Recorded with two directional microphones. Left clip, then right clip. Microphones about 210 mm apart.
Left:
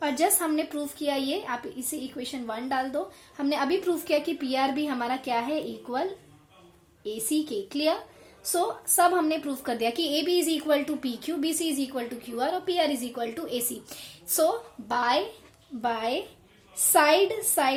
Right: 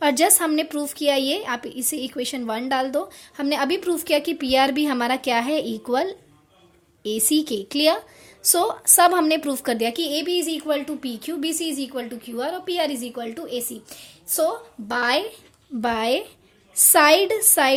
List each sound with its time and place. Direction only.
0.0 s a woman's voice: 50° right (ahead or behind); by 14.5 s 15° right (ahead or behind)
14.8 s speech: 35° right (ahead or behind)
15.8 s a woman's voice: 45° right (ahead or behind)